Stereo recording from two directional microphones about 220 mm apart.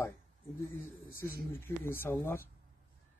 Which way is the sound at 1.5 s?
10° left (ahead or behind).